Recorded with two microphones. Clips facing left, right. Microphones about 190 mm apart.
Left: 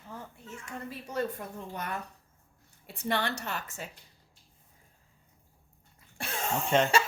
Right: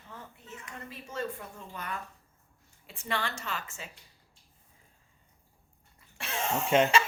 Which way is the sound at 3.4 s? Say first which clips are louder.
Left 1 dB; 55° left (ahead or behind).